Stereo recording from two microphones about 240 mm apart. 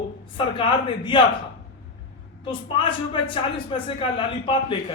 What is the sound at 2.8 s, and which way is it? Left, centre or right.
A man's voice, left.